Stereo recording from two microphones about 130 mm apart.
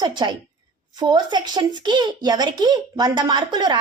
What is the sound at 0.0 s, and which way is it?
A woman's voice, 35° right (ahead or behind).